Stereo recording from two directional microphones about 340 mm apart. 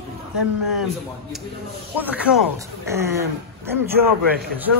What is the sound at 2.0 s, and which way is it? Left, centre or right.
A man's voice, centre.